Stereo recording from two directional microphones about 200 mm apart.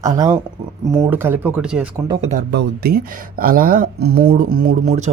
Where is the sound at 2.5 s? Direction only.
50° right (ahead or behind).